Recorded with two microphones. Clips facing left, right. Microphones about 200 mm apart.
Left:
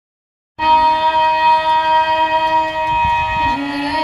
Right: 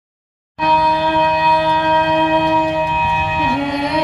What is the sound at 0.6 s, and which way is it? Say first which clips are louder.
Music: even; 50° right (ahead or behind).